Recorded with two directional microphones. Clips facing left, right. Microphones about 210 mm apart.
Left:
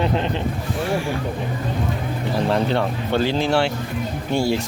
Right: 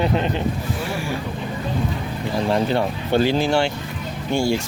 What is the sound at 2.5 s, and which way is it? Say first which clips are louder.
Speech: right 2 dB; 5° right (ahead or behind).